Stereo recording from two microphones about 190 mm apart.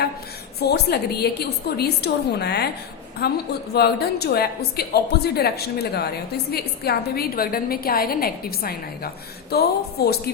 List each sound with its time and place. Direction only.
0.6 s a woman's voice: 60° left (ahead or behind)